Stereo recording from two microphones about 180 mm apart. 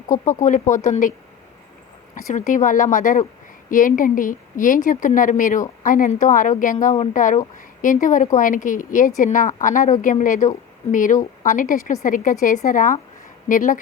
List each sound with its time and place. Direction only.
0.1 s a woman's voice: 45° left (ahead or behind)
2.1 s a woman's voice: 45° left (ahead or behind)